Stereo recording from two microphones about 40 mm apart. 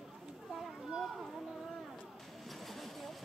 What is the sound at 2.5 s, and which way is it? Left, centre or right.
Vehicle, centre.